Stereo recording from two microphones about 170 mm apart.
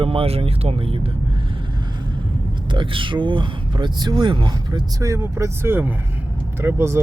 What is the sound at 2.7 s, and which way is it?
Speech, 30° right (ahead or behind).